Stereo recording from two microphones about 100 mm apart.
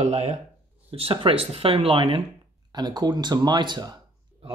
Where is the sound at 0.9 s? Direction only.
70° right (ahead or behind).